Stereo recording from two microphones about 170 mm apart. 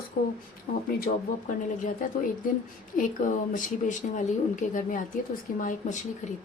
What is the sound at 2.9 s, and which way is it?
Speech, 50° left (ahead or behind).